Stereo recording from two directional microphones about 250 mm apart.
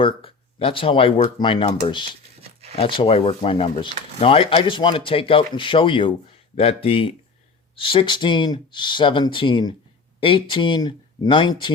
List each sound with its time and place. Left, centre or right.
0.0 s speech: left
2.4 s a sound: right
2.7 s speech: centre